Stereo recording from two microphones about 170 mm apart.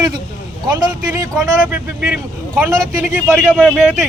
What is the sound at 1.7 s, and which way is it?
Speech, 5° right (ahead or behind).